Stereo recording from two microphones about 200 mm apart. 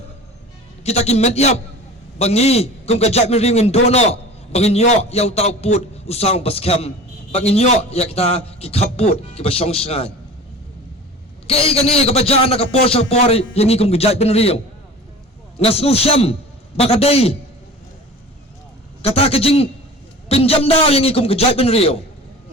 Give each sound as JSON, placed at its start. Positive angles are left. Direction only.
{"t": 0.9, "sound": "a man's voice", "side_deg": 30}
{"t": 11.4, "sound": "a man's voice", "side_deg": 30}
{"t": 19.0, "sound": "a man's voice", "side_deg": 30}